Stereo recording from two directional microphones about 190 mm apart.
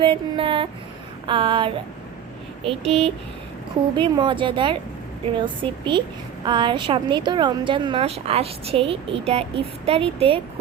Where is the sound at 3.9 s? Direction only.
25° right (ahead or behind).